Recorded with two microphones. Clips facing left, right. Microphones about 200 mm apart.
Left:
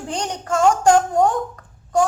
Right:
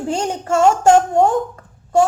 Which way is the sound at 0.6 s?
25° right (ahead or behind).